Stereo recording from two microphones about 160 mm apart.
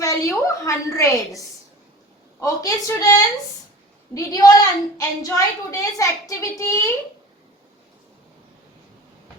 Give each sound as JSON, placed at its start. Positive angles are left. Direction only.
{"t": 0.0, "sound": "a woman's voice", "side_deg": 20}